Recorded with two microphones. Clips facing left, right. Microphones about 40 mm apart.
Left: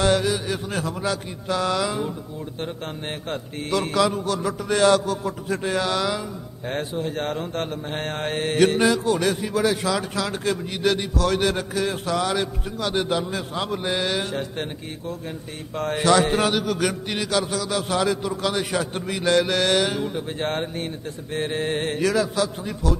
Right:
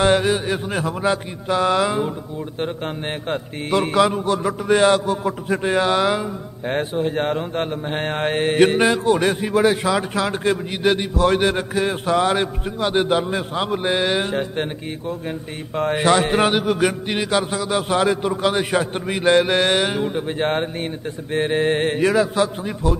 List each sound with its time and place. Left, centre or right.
0.0 s speech: right
3.3 s speech: right